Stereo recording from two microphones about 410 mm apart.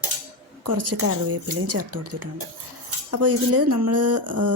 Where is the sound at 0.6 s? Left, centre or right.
Right.